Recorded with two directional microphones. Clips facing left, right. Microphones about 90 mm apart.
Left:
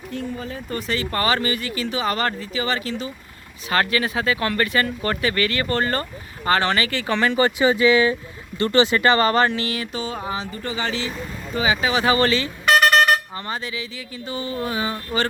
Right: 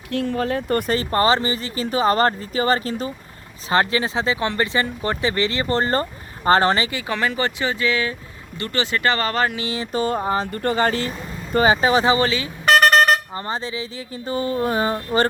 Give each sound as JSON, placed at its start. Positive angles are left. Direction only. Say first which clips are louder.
{"t": 0.1, "sound": "speech", "louder": "right 8 dB", "side_deg": -80}
{"t": 0.9, "sound": "speech", "louder": "right 2 dB", "side_deg": -35}
{"t": 3.7, "sound": "speech", "louder": "right 2 dB", "side_deg": -25}
{"t": 7.1, "sound": "speech", "louder": "left 5 dB", "side_deg": -5}
{"t": 8.5, "sound": "speech", "louder": "left 7 dB", "side_deg": 30}
{"t": 9.0, "sound": "speech", "louder": "left 3 dB", "side_deg": 5}
{"t": 9.5, "sound": "speech", "louder": "left 1 dB", "side_deg": -20}
{"t": 9.9, "sound": "speech", "louder": "right 6 dB", "side_deg": -45}
{"t": 12.0, "sound": "speech", "louder": "even", "side_deg": -15}
{"t": 12.6, "sound": "speech", "louder": "right 2 dB", "side_deg": -40}